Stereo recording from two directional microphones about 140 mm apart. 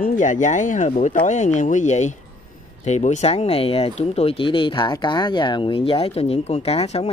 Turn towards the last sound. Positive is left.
turn(degrees=45)  # may be behind; listen again after turning